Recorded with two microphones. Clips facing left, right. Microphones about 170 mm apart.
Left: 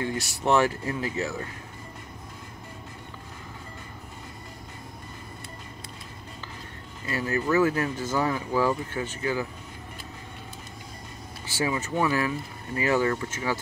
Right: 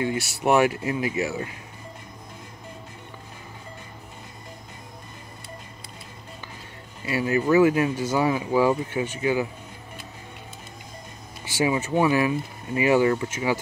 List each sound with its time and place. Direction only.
0.4 s speech: 10° right (ahead or behind)
7.1 s speech: 15° right (ahead or behind)
11.4 s speech: 15° right (ahead or behind)